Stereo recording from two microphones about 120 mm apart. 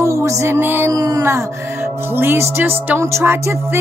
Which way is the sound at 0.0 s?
25° right (ahead or behind).